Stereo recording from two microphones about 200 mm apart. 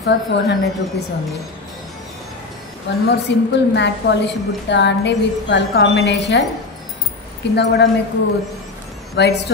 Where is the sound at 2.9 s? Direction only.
60° left (ahead or behind).